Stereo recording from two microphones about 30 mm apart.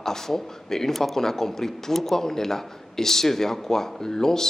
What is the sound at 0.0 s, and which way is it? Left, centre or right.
Speech, centre.